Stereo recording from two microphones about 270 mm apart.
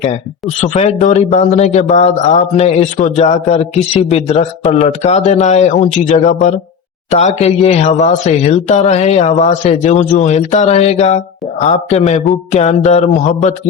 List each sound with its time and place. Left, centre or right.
0.0 s speech: left